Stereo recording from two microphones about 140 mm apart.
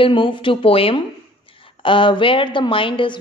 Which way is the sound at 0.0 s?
35° left (ahead or behind).